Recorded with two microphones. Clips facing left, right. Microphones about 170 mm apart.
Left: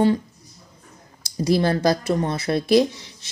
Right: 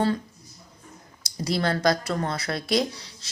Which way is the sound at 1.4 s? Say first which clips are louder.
Left 5 dB; 25° left (ahead or behind).